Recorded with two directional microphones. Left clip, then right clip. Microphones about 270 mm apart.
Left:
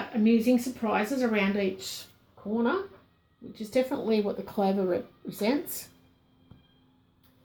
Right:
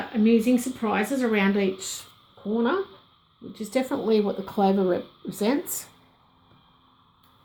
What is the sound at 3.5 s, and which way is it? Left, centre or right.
Speech, right.